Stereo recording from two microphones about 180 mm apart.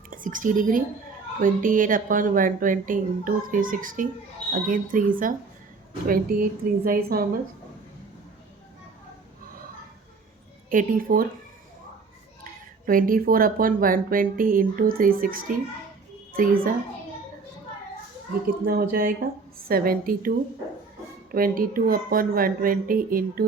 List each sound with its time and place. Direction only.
0.1 s a woman's voice: 45° right (ahead or behind)
10.7 s speech: 50° right (ahead or behind)
12.8 s a child's voice: 50° right (ahead or behind)
18.6 s a woman's voice: 55° right (ahead or behind)
21.3 s speech: 50° right (ahead or behind)